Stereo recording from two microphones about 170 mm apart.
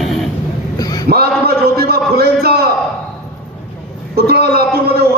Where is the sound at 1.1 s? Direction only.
65° right (ahead or behind).